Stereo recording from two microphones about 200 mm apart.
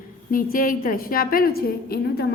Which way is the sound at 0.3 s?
45° left (ahead or behind).